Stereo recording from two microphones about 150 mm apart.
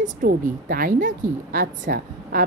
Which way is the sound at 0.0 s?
65° right (ahead or behind).